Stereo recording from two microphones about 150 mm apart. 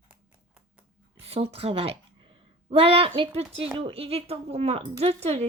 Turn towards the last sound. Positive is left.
turn(degrees=-45)  # may be behind; listen again after turning